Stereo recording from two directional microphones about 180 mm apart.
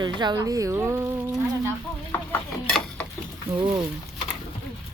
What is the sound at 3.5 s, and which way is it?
Speech, 25° right (ahead or behind).